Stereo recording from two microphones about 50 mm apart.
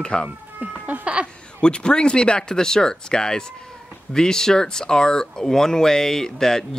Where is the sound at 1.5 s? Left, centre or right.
Centre.